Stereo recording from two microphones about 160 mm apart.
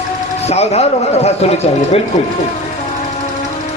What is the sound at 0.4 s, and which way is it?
Speech, 40° left (ahead or behind).